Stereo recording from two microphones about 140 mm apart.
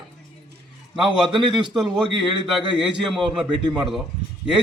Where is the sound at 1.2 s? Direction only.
5° right (ahead or behind).